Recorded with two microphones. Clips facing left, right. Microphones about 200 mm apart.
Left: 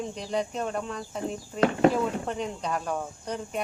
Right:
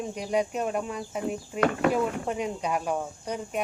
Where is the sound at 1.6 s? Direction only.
30° left (ahead or behind).